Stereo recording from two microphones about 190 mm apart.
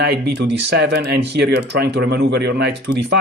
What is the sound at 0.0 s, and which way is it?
Speech, 60° right (ahead or behind).